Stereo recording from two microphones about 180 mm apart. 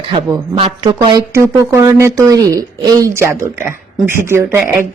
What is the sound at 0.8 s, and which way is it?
A woman's voice, 25° right (ahead or behind).